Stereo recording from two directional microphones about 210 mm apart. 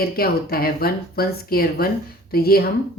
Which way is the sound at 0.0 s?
45° left (ahead or behind).